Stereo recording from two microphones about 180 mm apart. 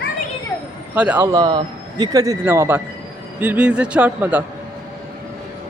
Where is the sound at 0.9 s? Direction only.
5° right (ahead or behind).